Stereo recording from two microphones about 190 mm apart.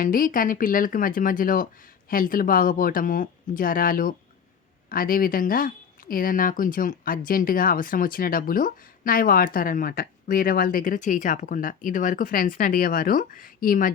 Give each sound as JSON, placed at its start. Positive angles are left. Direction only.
{"t": 0.0, "sound": "speech", "side_deg": 45}